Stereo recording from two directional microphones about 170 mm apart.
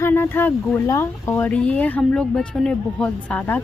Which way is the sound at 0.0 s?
15° left (ahead or behind).